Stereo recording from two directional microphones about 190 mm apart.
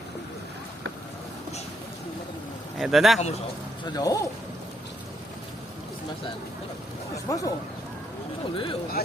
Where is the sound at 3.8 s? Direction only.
20° left (ahead or behind).